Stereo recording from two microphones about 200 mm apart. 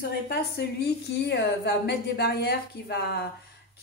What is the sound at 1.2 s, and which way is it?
A woman's voice, 55° left (ahead or behind).